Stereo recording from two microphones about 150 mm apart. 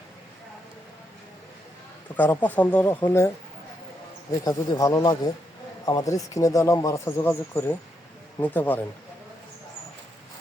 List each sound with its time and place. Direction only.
2.1 s speech: 10° left (ahead or behind)
4.7 s speech: 25° left (ahead or behind)